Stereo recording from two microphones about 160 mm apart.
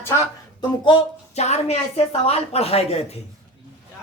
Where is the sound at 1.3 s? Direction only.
45° left (ahead or behind).